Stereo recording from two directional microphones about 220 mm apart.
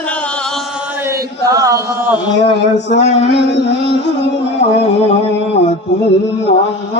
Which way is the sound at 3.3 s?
50° left (ahead or behind).